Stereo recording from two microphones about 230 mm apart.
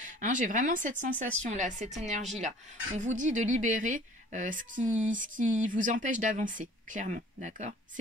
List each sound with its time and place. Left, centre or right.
0.0 s speech: right